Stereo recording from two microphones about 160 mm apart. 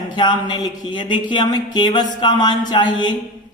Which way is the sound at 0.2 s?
30° left (ahead or behind).